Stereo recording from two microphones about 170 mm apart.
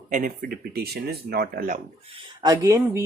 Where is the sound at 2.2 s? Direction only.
20° right (ahead or behind).